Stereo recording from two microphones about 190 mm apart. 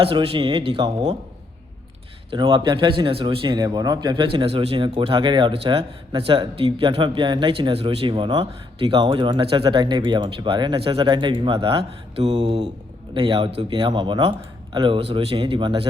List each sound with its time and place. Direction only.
0.0 s speech: 30° right (ahead or behind)
2.3 s speech: 25° right (ahead or behind)